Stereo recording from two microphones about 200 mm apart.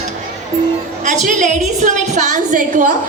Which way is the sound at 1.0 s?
40° right (ahead or behind).